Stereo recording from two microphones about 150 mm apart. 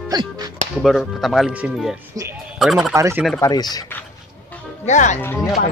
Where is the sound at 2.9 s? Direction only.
20° right (ahead or behind).